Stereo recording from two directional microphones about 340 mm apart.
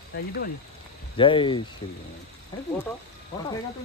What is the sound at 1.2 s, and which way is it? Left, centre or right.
Speech, centre.